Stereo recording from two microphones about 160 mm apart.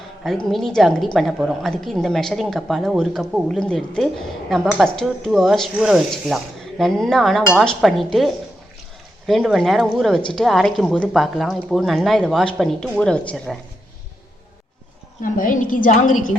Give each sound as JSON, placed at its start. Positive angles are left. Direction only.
{"t": 0.3, "sound": "a woman's voice", "side_deg": 0}
{"t": 15.2, "sound": "a woman's voice", "side_deg": 60}